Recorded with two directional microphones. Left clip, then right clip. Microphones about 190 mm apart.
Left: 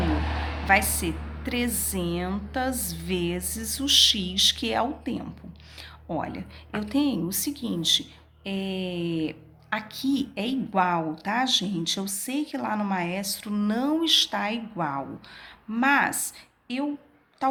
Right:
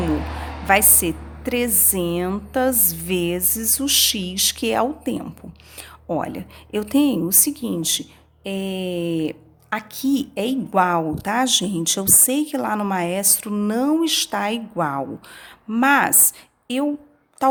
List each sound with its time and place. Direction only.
0.7 s a woman's voice: 50° right (ahead or behind)